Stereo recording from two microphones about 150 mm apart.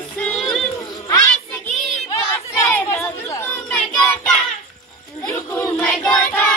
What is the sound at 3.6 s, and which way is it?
Child singing, 10° left (ahead or behind).